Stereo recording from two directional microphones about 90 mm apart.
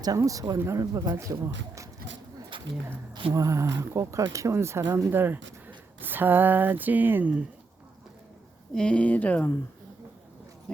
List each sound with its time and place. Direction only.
0.2 s speech: 40° right (ahead or behind)
2.5 s a sound: 70° right (ahead or behind)
3.1 s speech: 70° right (ahead or behind)
3.3 s speech: 35° right (ahead or behind); by 7.4 s 15° right (ahead or behind)
8.7 s speech: 10° left (ahead or behind)